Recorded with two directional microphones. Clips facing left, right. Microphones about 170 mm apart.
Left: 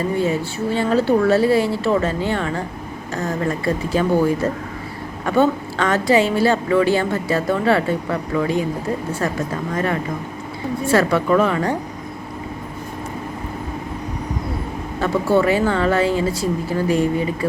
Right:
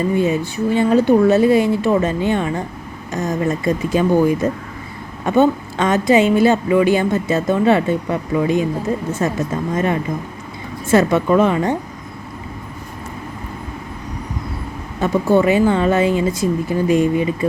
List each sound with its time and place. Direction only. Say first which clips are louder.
0.2 s a woman's voice: right 3 dB; 20° right (ahead or behind)
15.0 s a woman's voice: right 2 dB; 20° right (ahead or behind)